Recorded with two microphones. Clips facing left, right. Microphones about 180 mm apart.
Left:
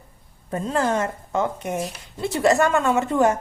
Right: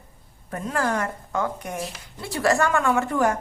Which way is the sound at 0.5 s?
25° left (ahead or behind).